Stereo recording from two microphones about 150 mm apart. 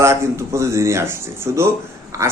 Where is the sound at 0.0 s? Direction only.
20° right (ahead or behind).